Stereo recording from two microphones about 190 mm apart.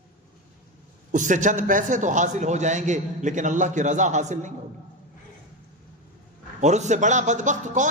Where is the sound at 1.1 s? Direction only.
40° right (ahead or behind).